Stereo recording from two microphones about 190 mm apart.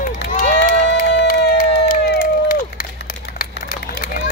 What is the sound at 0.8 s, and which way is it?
Crowd, 65° left (ahead or behind).